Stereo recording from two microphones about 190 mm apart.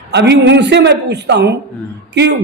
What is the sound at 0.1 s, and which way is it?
A man's voice, 65° right (ahead or behind).